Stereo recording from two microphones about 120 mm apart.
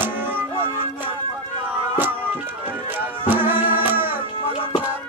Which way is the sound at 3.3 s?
15° right (ahead or behind).